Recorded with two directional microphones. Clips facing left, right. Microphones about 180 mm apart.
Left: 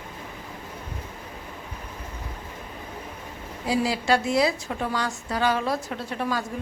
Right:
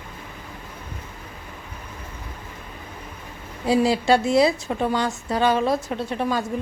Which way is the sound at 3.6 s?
25° right (ahead or behind).